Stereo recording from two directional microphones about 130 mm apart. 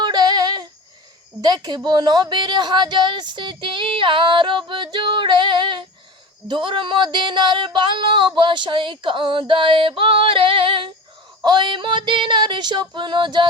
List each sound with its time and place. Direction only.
0.0 s female singing: 35° right (ahead or behind)
1.4 s a woman's voice: 35° right (ahead or behind)